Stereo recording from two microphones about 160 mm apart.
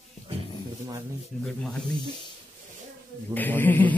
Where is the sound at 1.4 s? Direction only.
5° left (ahead or behind).